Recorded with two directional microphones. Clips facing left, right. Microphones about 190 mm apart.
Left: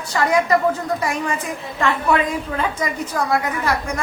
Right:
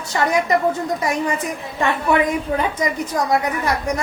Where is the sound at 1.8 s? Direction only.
20° right (ahead or behind).